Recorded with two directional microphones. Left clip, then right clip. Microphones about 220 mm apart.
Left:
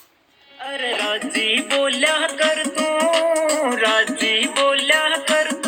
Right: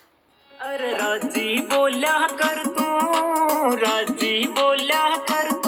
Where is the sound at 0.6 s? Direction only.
55° right (ahead or behind).